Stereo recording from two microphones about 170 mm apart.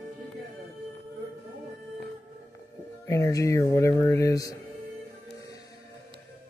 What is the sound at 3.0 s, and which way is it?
Speech, 15° left (ahead or behind).